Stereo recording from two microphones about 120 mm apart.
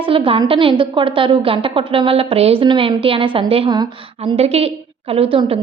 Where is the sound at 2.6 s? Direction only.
45° right (ahead or behind).